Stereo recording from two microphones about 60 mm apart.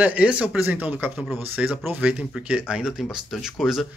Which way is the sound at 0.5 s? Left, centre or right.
Right.